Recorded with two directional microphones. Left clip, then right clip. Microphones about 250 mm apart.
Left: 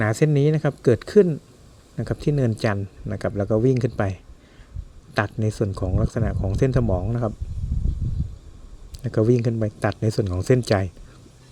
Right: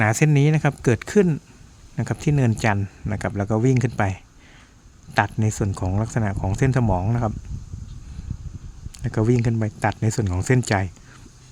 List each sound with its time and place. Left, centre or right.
0.0 s speech: centre
8.9 s speech: centre